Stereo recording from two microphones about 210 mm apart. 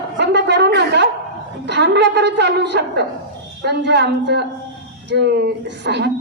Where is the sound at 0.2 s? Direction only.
55° right (ahead or behind).